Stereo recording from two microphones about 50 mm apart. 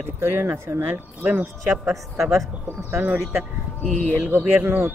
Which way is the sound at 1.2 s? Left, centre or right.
Right.